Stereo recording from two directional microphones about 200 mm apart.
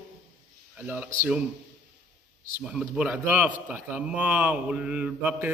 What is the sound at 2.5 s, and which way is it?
A man's voice, 5° right (ahead or behind).